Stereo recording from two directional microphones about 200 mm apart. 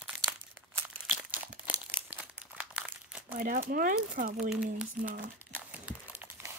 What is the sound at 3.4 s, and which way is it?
Speech, 45° right (ahead or behind).